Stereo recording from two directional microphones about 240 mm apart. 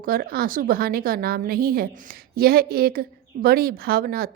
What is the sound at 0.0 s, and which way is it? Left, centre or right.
A woman's voice, right.